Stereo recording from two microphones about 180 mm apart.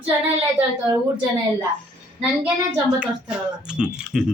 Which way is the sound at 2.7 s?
5° right (ahead or behind).